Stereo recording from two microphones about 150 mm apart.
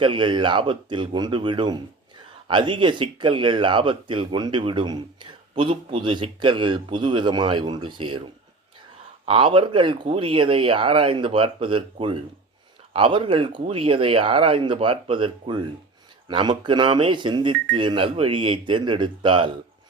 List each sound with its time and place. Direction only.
0.0 s speech: 35° right (ahead or behind)
9.2 s speech: 35° right (ahead or behind)